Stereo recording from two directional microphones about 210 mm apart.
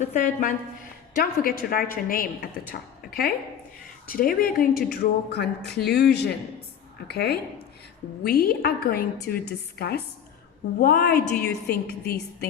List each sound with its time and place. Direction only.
0.1 s a woman's voice: 40° left (ahead or behind)